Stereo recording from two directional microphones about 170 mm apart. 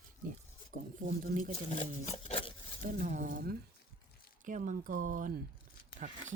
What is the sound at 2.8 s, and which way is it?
Speech, 55° right (ahead or behind).